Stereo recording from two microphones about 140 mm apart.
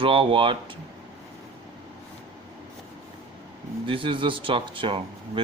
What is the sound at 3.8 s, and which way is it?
Speech, 40° right (ahead or behind).